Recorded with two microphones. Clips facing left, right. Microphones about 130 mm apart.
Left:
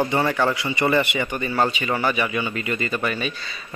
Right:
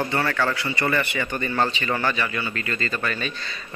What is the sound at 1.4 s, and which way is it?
Speech, 5° left (ahead or behind).